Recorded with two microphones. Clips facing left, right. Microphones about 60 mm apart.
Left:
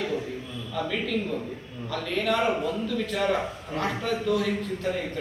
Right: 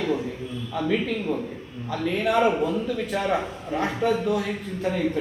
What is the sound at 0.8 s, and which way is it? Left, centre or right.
A man's voice, centre.